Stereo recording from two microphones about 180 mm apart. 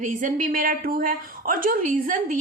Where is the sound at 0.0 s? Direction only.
45° right (ahead or behind).